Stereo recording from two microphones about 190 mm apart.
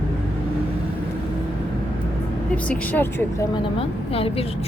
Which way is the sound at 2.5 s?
5° left (ahead or behind).